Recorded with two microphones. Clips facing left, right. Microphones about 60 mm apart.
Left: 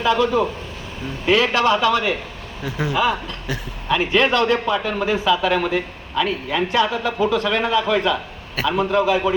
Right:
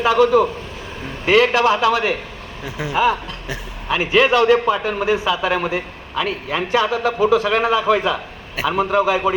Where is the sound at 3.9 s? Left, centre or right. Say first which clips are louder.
Right 2 dB; centre.